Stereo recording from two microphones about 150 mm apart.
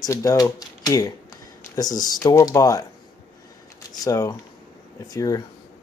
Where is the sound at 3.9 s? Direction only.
25° left (ahead or behind).